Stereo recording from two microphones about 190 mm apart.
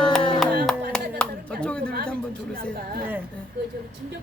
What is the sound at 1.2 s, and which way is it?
Clapping, 5° left (ahead or behind).